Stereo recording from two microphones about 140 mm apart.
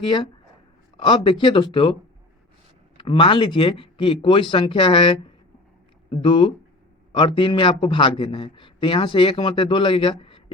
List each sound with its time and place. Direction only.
0.0 s a man's voice: 35° left (ahead or behind)
3.0 s a man's voice: 35° left (ahead or behind)